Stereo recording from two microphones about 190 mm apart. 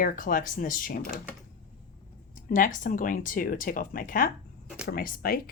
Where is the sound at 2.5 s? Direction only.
45° left (ahead or behind).